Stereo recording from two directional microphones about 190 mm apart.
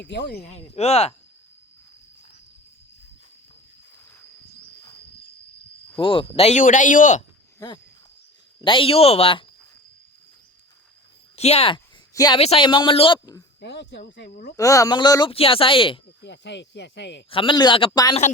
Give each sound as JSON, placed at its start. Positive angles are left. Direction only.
{"t": 0.0, "sound": "speech", "side_deg": 60}
{"t": 0.4, "sound": "speech", "side_deg": 35}
{"t": 6.0, "sound": "speech", "side_deg": 25}
{"t": 7.6, "sound": "a man's voice", "side_deg": 20}
{"t": 11.3, "sound": "speech", "side_deg": 35}
{"t": 12.1, "sound": "speech", "side_deg": 20}
{"t": 12.4, "sound": "a man's voice", "side_deg": 30}
{"t": 13.6, "sound": "speech", "side_deg": 65}
{"t": 14.5, "sound": "a man's voice", "side_deg": 15}
{"t": 16.2, "sound": "speech", "side_deg": 65}
{"t": 17.2, "sound": "a man's voice", "side_deg": 25}